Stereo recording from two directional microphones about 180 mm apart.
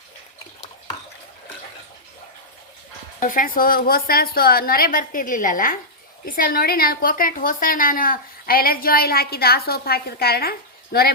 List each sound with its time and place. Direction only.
3.2 s a woman's voice: 50° left (ahead or behind)